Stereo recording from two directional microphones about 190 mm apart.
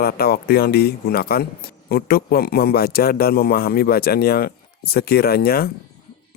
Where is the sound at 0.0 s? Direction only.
55° left (ahead or behind).